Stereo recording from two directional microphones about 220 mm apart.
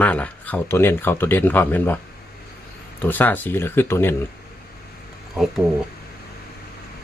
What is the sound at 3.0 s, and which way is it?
Speech, 10° left (ahead or behind).